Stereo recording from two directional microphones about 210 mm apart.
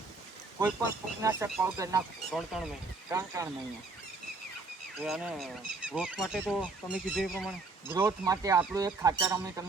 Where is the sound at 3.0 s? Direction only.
15° right (ahead or behind).